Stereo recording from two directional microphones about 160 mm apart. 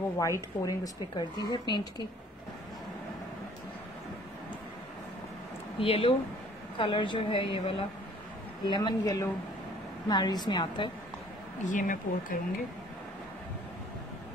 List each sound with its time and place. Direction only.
0.2 s speech: 20° left (ahead or behind)
5.8 s speech: 35° left (ahead or behind)
11.6 s speech: 55° left (ahead or behind)